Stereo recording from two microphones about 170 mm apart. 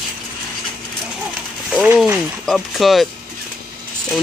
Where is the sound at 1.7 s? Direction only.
5° right (ahead or behind).